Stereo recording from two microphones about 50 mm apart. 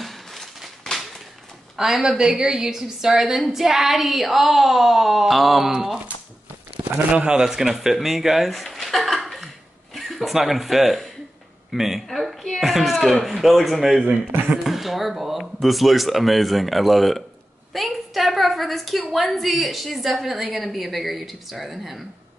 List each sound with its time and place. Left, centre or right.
0.0 s a sound: centre
1.8 s a woman's voice: centre
6.9 s speech: centre
7.4 s a woman's voice: centre
14.0 s speech: right
14.6 s a woman's voice: centre